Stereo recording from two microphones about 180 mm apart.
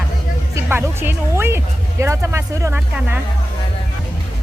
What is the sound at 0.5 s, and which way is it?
Speech, 15° right (ahead or behind).